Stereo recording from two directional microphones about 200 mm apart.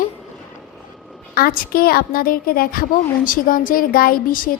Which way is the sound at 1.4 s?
50° left (ahead or behind).